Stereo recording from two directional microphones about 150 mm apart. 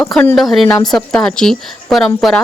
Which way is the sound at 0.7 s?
25° left (ahead or behind).